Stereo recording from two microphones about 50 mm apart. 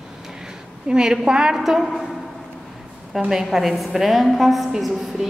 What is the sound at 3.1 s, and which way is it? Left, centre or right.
A woman's voice, centre.